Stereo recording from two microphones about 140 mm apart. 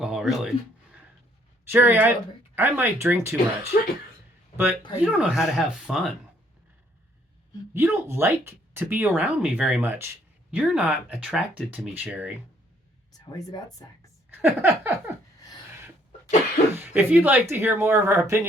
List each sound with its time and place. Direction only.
0.0 s a sound: 5° right (ahead or behind)
1.7 s speech: 15° right (ahead or behind)
7.7 s speech: 15° right (ahead or behind)
13.3 s speech: 25° left (ahead or behind)
14.3 s speech: 15° right (ahead or behind)
16.7 s speech: 15° right (ahead or behind)